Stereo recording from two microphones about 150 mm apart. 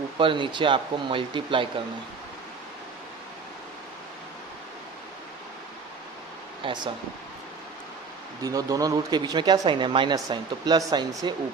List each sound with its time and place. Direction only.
0.2 s speech: 35° right (ahead or behind)
6.6 s speech: 30° right (ahead or behind)
8.4 s speech: 25° right (ahead or behind)